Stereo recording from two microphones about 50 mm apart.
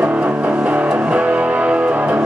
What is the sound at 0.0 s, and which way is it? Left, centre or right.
Music, right.